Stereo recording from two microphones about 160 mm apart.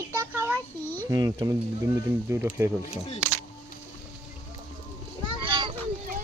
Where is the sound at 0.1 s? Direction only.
15° right (ahead or behind).